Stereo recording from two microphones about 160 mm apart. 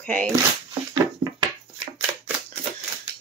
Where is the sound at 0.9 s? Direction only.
25° right (ahead or behind).